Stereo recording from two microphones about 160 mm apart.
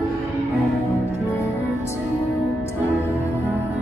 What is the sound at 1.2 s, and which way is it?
Music, 20° left (ahead or behind).